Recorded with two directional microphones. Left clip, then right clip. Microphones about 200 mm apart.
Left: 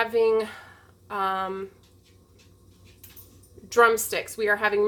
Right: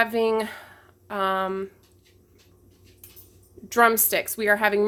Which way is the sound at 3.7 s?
40° right (ahead or behind).